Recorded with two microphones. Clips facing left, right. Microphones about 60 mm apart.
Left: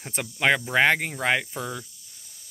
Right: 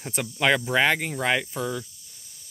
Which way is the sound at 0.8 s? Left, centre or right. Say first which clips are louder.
Left 1 dB; left.